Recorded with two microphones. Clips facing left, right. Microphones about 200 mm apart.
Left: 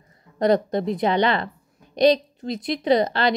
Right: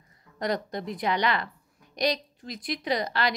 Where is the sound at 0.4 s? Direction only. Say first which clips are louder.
Left 10 dB; 25° left (ahead or behind).